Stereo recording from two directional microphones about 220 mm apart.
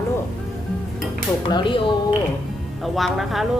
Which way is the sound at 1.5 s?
20° left (ahead or behind).